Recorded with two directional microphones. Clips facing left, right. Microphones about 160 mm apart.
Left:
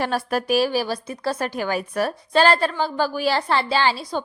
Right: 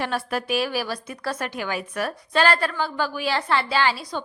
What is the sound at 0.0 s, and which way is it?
A woman's voice, 40° left (ahead or behind).